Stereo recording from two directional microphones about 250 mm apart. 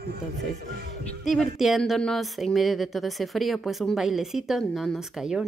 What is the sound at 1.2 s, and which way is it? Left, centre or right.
Speech, centre.